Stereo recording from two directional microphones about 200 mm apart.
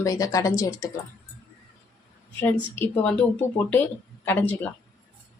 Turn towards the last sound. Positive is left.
turn(degrees=10)  # may be behind; listen again after turning